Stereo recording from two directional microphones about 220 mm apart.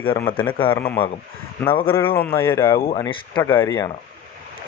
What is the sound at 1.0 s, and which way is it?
Speech, 25° left (ahead or behind).